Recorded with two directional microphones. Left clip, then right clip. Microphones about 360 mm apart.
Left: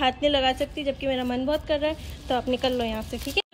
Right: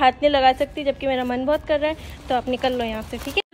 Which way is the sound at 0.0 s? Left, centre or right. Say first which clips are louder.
Right 6 dB; centre.